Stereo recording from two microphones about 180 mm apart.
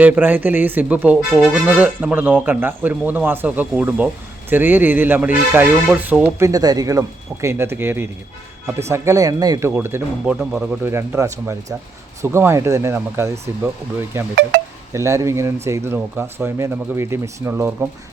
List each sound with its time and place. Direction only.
0.0 s speech: 10° right (ahead or behind)
6.5 s speech: 20° right (ahead or behind); by 10.8 s centre (ahead or behind)
10.8 s speech: 15° right (ahead or behind)